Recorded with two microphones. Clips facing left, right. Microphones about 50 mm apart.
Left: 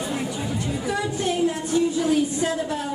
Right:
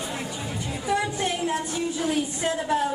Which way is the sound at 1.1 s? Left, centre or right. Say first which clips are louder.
Left 3 dB; right.